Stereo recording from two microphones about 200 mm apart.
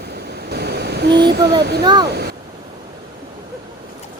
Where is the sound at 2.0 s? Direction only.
55° right (ahead or behind).